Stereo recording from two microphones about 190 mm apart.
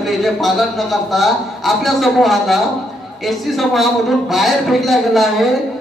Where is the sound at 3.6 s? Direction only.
Centre (ahead or behind).